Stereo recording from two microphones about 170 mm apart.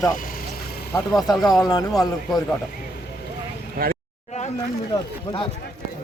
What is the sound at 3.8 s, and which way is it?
Speech, 60° right (ahead or behind).